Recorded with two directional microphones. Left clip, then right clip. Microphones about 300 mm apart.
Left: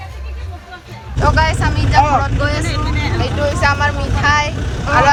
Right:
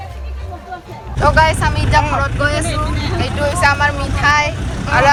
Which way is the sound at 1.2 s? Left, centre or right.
Centre.